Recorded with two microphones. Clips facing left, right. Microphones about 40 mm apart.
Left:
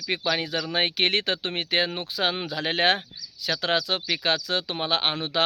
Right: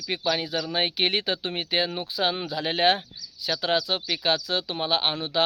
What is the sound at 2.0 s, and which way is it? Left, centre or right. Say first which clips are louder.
Speech: even; left.